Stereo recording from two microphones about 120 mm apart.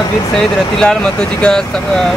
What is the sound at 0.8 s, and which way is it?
Speech, 5° left (ahead or behind).